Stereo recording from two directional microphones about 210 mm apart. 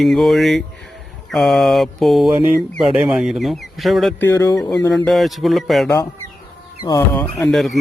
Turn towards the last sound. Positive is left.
turn(degrees=0)  # may be behind; listen again after turning